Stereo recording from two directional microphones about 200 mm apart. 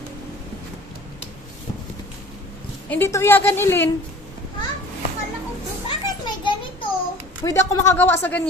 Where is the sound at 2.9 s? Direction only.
10° left (ahead or behind).